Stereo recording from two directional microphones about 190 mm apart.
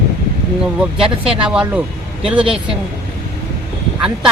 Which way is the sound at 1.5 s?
5° right (ahead or behind).